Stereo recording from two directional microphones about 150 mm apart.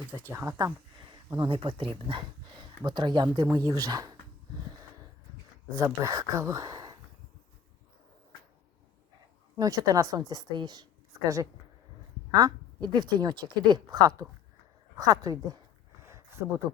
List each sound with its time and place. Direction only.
0.3 s speech: 20° right (ahead or behind)
1.4 s a woman's voice: 35° right (ahead or behind)
5.7 s a woman's voice: 20° right (ahead or behind)
9.6 s a woman's voice: 25° right (ahead or behind)
16.0 s a sound: 15° right (ahead or behind)